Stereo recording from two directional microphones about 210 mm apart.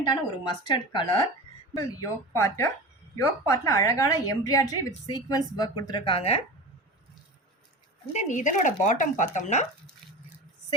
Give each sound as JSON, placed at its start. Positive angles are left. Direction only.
{"t": 0.0, "sound": "a woman's voice", "side_deg": 20}
{"t": 1.7, "sound": "speech", "side_deg": 0}
{"t": 2.3, "sound": "a woman's voice", "side_deg": 10}
{"t": 8.1, "sound": "speech", "side_deg": 35}